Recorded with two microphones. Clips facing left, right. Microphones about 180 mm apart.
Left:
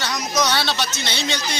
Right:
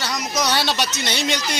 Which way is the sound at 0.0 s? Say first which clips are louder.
Left 1 dB; 10° right (ahead or behind).